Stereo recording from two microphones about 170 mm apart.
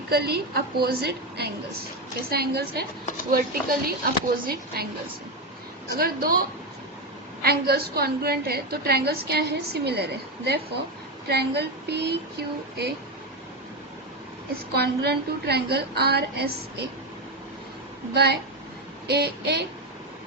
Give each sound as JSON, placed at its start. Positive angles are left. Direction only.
{"t": 0.1, "sound": "a woman's voice", "side_deg": -70}
{"t": 5.9, "sound": "a woman's voice", "side_deg": -65}
{"t": 14.7, "sound": "a woman's voice", "side_deg": -75}
{"t": 18.1, "sound": "a woman's voice", "side_deg": -65}